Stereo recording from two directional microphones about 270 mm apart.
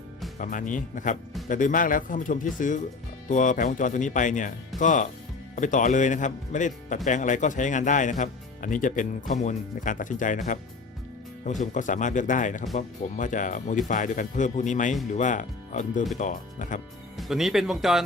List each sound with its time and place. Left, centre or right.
0.3 s speech: left
11.6 s speech: left
17.2 s speech: centre